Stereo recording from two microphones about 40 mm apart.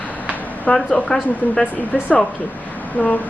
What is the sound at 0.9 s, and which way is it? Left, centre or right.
Speech, left.